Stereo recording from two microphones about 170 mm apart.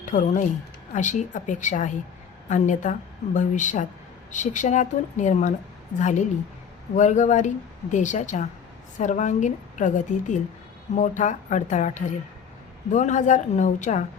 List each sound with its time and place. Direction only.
0.0 s speech: 45° left (ahead or behind)